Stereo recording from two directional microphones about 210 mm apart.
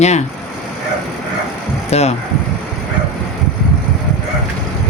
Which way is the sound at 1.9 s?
30° left (ahead or behind).